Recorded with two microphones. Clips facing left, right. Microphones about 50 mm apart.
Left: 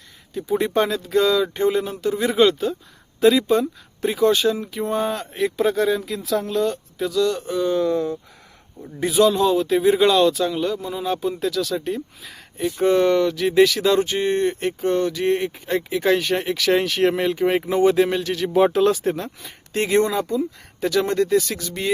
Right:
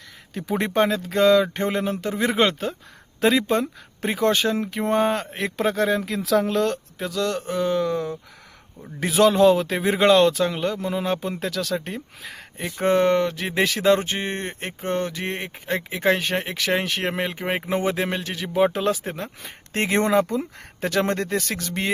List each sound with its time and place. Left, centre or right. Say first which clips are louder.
0.5 s speech: left 1 dB; right
4.9 s speech: right 3 dB; right
6.0 s speech: right 3 dB; right
7.0 s speech: left 5 dB; right
9.0 s speech: even; right
18.4 s speech: left 4 dB; centre
19.2 s speech: left 1 dB; right
20.1 s speech: right 2 dB; right
20.8 s speech: left 3 dB; right